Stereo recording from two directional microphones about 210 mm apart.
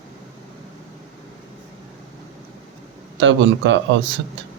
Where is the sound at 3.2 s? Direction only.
60° right (ahead or behind).